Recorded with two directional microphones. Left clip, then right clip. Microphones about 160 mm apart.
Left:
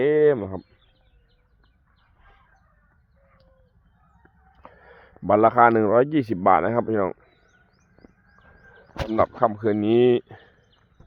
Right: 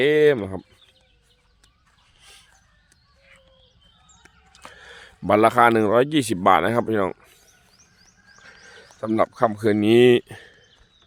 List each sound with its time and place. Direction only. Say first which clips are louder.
0.0 s speech: right 1 dB; 30° right (ahead or behind)
4.5 s speech: right 5 dB; 35° right (ahead or behind)
8.0 s a sound: right 3 dB; 90° right
8.4 s speech: right 6 dB; 45° right (ahead or behind)